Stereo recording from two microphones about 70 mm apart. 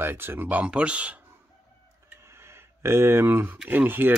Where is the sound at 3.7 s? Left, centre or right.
Right.